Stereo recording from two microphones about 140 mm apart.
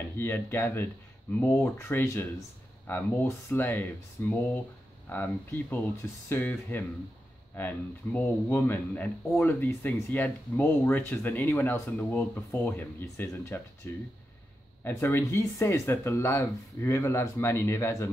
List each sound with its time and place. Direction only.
0.2 s speech: 15° left (ahead or behind)